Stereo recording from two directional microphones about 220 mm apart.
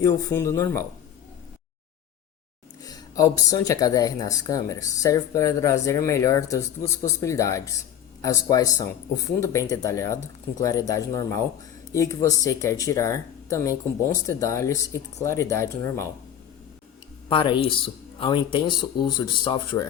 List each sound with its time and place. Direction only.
0.0 s speech: 15° left (ahead or behind)
2.8 s speech: 15° left (ahead or behind)
17.2 s speech: 25° left (ahead or behind)